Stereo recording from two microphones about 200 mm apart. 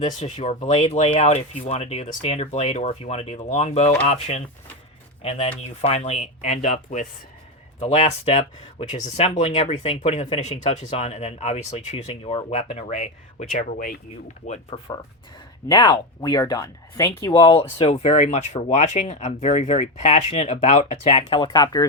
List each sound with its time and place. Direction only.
0.2 s speech: 35° left (ahead or behind)
14.7 s speech: 20° left (ahead or behind)